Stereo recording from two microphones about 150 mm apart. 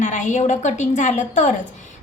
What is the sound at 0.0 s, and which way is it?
A woman's voice, 55° left (ahead or behind).